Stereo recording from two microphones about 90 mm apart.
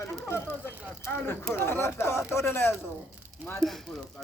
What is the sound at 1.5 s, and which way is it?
Speech, 25° left (ahead or behind).